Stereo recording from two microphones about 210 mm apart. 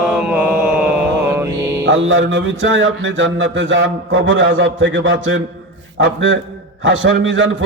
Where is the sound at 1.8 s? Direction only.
60° right (ahead or behind).